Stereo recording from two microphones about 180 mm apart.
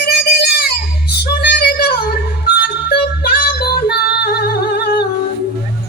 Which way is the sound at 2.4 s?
60° left (ahead or behind).